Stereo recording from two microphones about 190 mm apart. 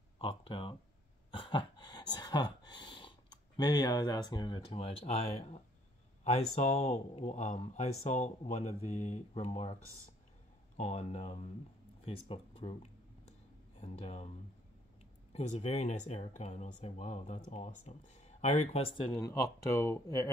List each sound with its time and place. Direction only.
0.2 s speech: 25° left (ahead or behind)
1.3 s a sound: 25° left (ahead or behind)
6.2 s speech: 35° left (ahead or behind)
10.8 s speech: 35° left (ahead or behind)
15.3 s speech: 35° left (ahead or behind); by 20.2 s 15° left (ahead or behind)